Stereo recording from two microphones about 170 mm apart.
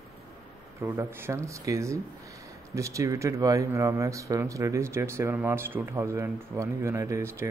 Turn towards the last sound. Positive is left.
turn(degrees=-15)  # may be behind; listen again after turning